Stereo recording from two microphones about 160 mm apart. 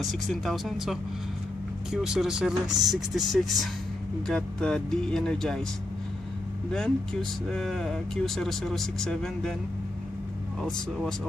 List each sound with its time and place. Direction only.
0.0 s speech: centre (ahead or behind)
2.6 s speech: 25° right (ahead or behind)
2.9 s speech: centre (ahead or behind)
6.7 s speech: 5° left (ahead or behind)
10.6 s speech: 5° left (ahead or behind)